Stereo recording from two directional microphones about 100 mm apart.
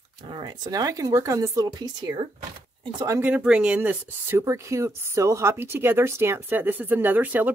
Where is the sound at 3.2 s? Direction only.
15° right (ahead or behind).